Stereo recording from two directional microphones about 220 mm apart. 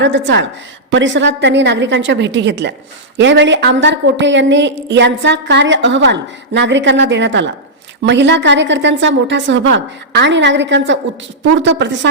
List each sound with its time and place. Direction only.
0.0 s a woman's voice: 55° right (ahead or behind)